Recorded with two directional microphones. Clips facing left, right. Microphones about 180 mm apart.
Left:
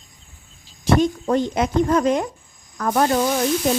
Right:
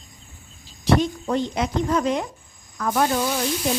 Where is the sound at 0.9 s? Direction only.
50° left (ahead or behind).